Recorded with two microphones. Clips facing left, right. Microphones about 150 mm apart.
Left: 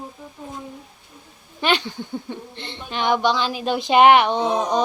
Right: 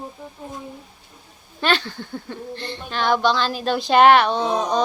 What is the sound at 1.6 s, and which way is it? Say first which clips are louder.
Speech: even; 15° left (ahead or behind).